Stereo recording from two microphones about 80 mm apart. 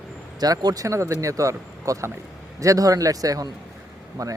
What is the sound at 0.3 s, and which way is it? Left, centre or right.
Speech, right.